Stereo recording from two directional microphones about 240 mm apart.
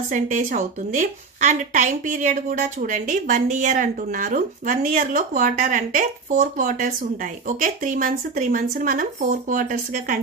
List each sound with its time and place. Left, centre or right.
0.1 s a woman's voice: right